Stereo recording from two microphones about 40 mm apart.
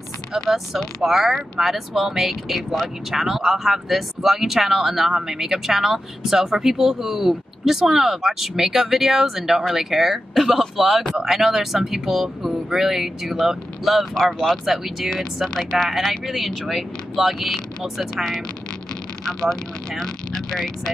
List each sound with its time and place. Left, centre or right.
1.0 s speech: centre
14.5 s speech: centre
15.4 s speech: centre
15.9 s speech: centre